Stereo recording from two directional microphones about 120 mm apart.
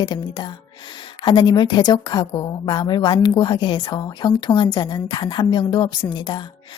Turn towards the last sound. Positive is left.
turn(degrees=40)  # may be behind; listen again after turning